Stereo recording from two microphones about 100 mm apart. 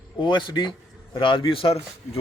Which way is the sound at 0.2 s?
50° left (ahead or behind).